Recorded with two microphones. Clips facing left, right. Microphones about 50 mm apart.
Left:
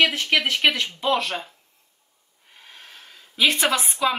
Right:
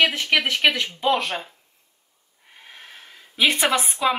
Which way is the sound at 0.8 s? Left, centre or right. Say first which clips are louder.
Right 1 dB; right.